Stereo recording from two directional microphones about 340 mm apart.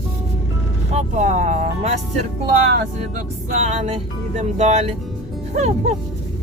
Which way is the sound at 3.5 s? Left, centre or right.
Centre.